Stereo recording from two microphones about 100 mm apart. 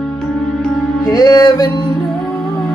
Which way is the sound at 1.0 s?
35° left (ahead or behind).